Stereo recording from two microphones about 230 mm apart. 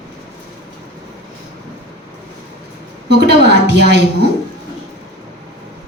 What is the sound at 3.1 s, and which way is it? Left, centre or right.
Speech, right.